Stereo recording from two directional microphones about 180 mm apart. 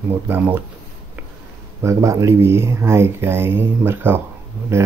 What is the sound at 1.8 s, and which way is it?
Speech, 15° right (ahead or behind).